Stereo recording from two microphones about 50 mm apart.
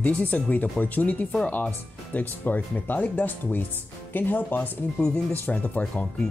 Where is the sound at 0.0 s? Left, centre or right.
Left.